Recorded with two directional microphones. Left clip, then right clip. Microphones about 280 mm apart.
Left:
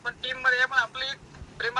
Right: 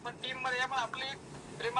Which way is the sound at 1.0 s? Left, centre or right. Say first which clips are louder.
Left 7 dB; left.